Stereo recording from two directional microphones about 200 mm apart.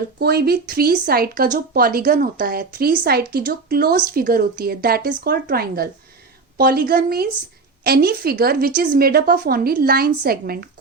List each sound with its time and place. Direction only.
0.2 s a woman's voice: 50° right (ahead or behind)